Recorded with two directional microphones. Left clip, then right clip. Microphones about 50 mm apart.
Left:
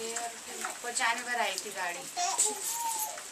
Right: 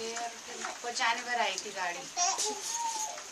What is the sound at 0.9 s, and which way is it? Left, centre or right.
A woman's voice, centre.